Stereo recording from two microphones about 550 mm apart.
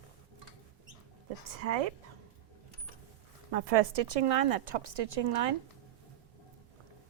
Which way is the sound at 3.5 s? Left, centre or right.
Right.